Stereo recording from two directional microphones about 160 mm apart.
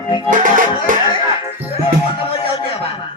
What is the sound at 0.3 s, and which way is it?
Music, 55° right (ahead or behind).